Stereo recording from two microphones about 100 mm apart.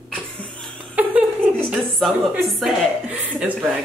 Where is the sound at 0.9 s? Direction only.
15° right (ahead or behind).